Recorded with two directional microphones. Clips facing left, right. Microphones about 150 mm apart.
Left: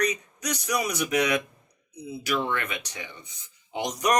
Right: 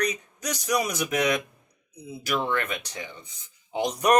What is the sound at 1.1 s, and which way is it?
Speech, 45° right (ahead or behind).